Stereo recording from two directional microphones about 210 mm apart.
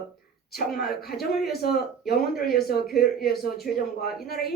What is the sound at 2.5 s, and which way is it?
Speech, 50° left (ahead or behind).